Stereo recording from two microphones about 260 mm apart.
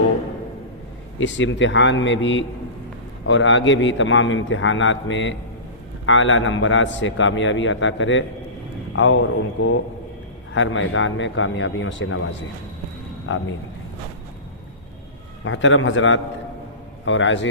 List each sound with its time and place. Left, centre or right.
1.2 s a man's voice: left
10.5 s a man's voice: left
15.4 s a man's voice: left